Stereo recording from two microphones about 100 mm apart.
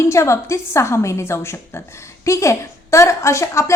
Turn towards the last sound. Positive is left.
turn(degrees=30)  # may be behind; listen again after turning